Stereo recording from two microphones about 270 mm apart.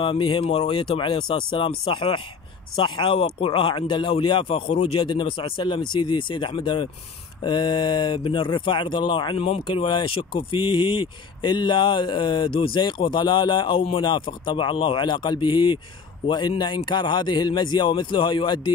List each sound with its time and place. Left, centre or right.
0.0 s speech: centre